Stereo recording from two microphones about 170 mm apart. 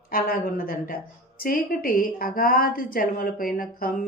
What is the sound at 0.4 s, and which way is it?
A woman's voice, 60° left (ahead or behind).